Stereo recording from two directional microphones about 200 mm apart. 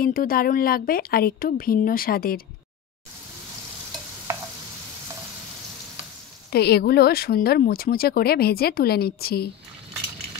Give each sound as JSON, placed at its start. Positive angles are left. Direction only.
{"t": 0.0, "sound": "speech", "side_deg": 45}
{"t": 6.5, "sound": "speech", "side_deg": 55}